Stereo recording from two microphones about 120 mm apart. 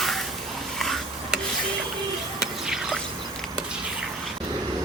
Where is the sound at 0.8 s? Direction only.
Centre (ahead or behind).